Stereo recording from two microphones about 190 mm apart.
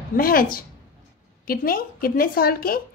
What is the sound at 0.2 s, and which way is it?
A woman's voice, 50° left (ahead or behind).